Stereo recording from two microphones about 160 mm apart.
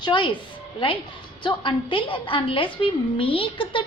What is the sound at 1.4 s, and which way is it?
A woman's voice, 30° left (ahead or behind).